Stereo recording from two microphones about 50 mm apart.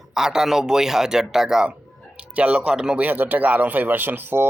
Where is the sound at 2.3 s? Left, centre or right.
Right.